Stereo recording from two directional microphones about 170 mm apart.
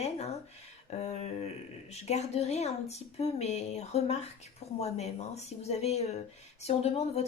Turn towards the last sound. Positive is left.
turn(degrees=35)  # may be behind; listen again after turning